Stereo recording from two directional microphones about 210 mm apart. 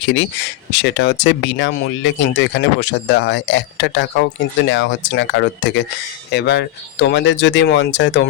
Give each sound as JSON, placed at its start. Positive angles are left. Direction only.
{"t": 0.0, "sound": "speech", "side_deg": 60}